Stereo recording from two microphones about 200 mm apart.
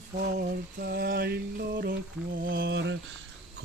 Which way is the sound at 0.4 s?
50° right (ahead or behind).